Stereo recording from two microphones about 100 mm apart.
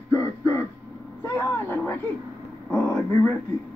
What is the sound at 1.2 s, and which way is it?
Speech, 20° left (ahead or behind).